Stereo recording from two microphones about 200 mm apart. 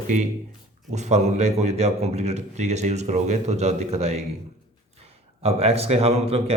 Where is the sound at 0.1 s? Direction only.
35° right (ahead or behind).